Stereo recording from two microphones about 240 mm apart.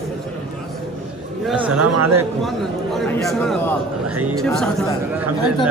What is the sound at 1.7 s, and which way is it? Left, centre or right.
Speech, right.